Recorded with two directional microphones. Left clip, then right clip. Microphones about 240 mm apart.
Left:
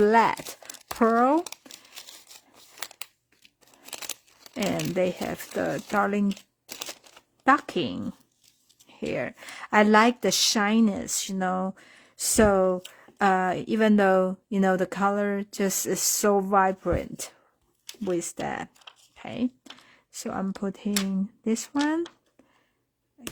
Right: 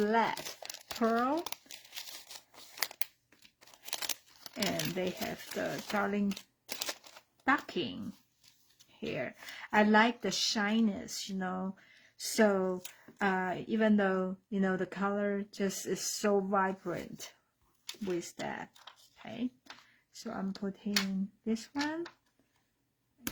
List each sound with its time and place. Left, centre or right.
0.0 s speech: left
2.3 s crumpling: centre
3.8 s scissors: centre
4.5 s speech: left
6.2 s shuffling cards: centre
7.4 s speech: left
9.0 s speech: left
18.4 s speech: left
20.2 s speech: left